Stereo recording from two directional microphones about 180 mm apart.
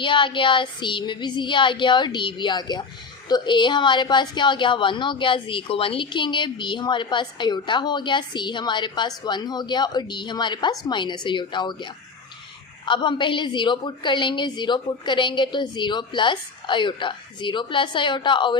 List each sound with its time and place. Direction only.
0.0 s a woman's voice: 25° left (ahead or behind)